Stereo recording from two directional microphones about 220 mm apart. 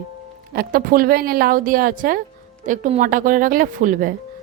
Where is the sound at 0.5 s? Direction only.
40° right (ahead or behind).